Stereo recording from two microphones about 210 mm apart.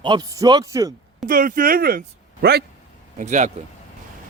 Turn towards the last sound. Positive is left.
turn(degrees=-35)  # may be behind; listen again after turning